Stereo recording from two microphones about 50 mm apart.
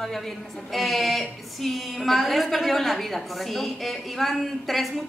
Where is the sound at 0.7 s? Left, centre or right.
Centre.